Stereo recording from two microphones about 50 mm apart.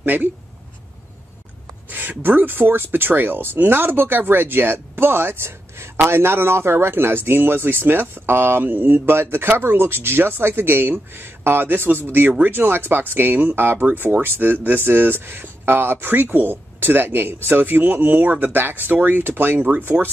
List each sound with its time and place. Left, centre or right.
0.0 s speech: right
1.9 s speech: right
19.6 s speech: right